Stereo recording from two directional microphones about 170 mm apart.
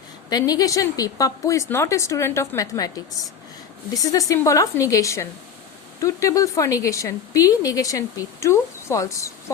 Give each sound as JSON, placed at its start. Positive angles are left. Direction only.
{"t": 0.3, "sound": "a woman's voice", "side_deg": 25}